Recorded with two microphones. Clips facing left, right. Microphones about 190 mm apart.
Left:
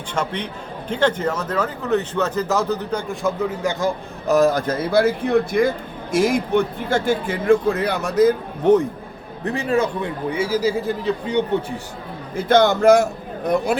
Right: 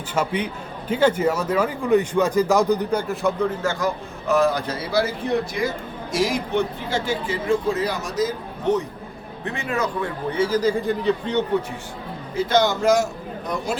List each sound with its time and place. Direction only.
0.1 s a man's voice: 10° right (ahead or behind)
3.6 s a man's voice: 15° left (ahead or behind)
3.8 s speech: 40° left (ahead or behind); by 8.8 s 60° left (ahead or behind)
9.4 s a man's voice: 35° left (ahead or behind)
10.3 s a man's voice: 10° left (ahead or behind)
12.4 s a man's voice: 55° left (ahead or behind)